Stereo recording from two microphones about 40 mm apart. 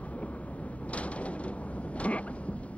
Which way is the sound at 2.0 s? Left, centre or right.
Left.